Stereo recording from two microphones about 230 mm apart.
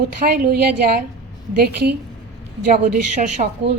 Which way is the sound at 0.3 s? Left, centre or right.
Right.